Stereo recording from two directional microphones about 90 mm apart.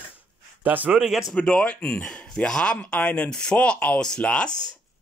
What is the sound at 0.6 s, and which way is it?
Speech, 15° right (ahead or behind).